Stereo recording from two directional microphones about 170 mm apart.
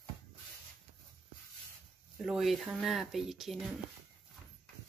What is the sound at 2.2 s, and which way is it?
Speech, centre (ahead or behind).